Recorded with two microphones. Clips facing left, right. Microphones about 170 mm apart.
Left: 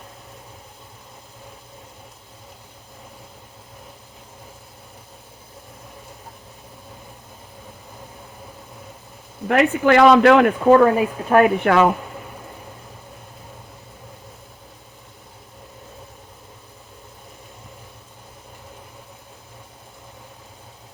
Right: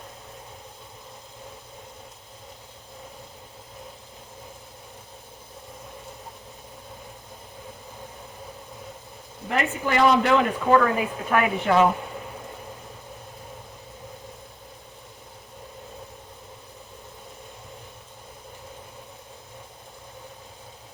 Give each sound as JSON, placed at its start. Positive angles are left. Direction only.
{"t": 9.5, "sound": "speech", "side_deg": 75}
{"t": 10.7, "sound": "speech", "side_deg": 35}
{"t": 11.6, "sound": "speech", "side_deg": 70}